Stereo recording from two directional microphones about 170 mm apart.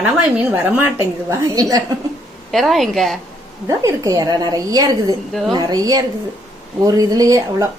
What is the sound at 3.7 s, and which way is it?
A woman's voice, 20° right (ahead or behind).